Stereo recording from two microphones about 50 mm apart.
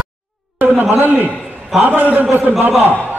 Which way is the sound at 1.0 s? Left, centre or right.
Right.